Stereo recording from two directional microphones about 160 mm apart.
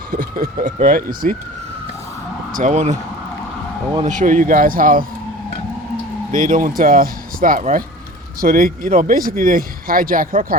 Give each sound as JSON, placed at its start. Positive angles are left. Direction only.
{"t": 0.1, "sound": "speech", "side_deg": -65}
{"t": 2.5, "sound": "speech", "side_deg": -55}
{"t": 4.0, "sound": "speech", "side_deg": -55}
{"t": 6.3, "sound": "speech", "side_deg": -55}